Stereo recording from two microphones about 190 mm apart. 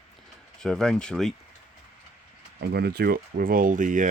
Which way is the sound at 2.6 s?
60° right (ahead or behind).